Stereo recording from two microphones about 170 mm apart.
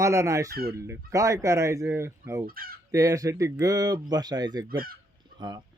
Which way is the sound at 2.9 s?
20° right (ahead or behind).